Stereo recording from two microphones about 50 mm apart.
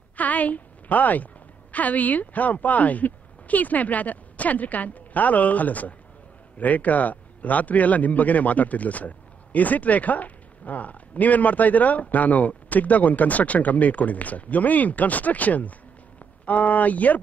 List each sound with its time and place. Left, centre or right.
0.1 s a woman's voice: left